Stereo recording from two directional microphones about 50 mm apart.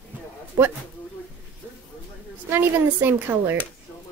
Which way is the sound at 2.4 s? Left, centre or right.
Right.